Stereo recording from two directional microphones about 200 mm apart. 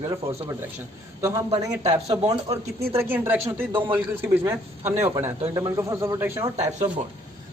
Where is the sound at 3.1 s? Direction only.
10° right (ahead or behind).